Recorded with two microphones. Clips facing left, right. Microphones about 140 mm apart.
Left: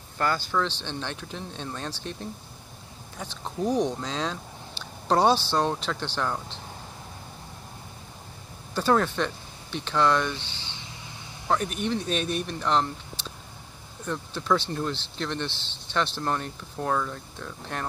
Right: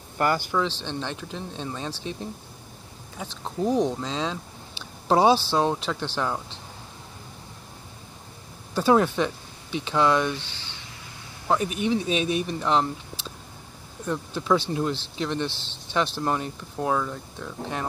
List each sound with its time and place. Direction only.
0.2 s speech: 15° right (ahead or behind)
0.7 s speech: centre (ahead or behind)
8.7 s speech: 10° right (ahead or behind)
10.3 s a sound: 30° left (ahead or behind)
11.4 s speech: 5° right (ahead or behind)